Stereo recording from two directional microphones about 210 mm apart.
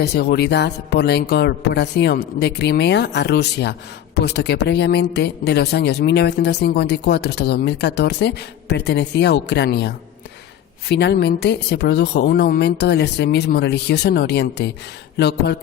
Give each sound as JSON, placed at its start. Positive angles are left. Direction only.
{"t": 0.0, "sound": "speech", "side_deg": 50}